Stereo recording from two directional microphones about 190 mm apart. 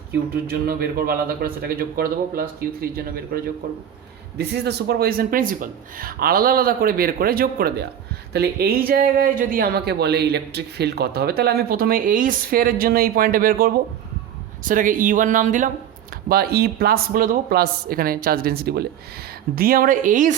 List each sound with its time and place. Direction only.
0.4 s speech: 50° right (ahead or behind)
16.3 s speech: 55° right (ahead or behind)